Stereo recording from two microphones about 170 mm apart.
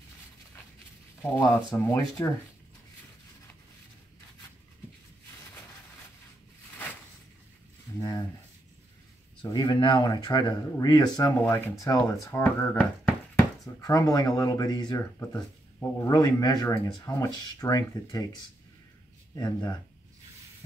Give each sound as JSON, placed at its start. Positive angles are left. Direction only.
{"t": 1.2, "sound": "speech", "side_deg": 15}
{"t": 8.0, "sound": "a sound", "side_deg": 25}
{"t": 9.4, "sound": "speech", "side_deg": 25}
{"t": 13.7, "sound": "speech", "side_deg": 20}